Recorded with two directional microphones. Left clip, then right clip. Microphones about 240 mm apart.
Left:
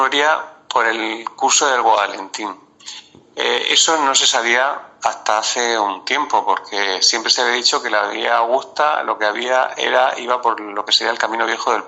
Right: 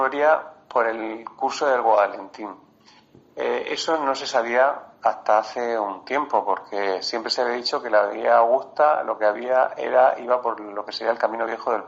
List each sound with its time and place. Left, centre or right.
0.0 s speech: centre